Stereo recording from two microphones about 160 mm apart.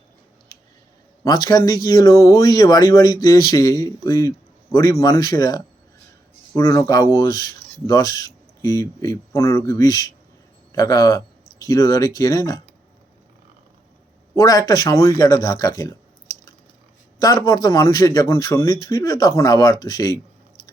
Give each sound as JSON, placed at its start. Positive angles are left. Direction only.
{"t": 1.2, "sound": "speech", "side_deg": 25}
{"t": 14.3, "sound": "speech", "side_deg": 25}
{"t": 17.2, "sound": "speech", "side_deg": 25}